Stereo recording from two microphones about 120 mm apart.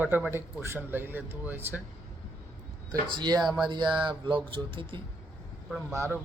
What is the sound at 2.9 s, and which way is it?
Speech, 40° right (ahead or behind).